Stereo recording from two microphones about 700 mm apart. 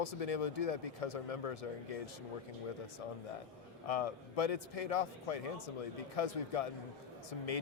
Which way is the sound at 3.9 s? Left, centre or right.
Left.